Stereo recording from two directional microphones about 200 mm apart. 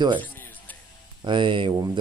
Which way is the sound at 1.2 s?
25° right (ahead or behind).